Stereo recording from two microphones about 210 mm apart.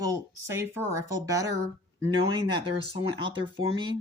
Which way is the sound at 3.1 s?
25° right (ahead or behind).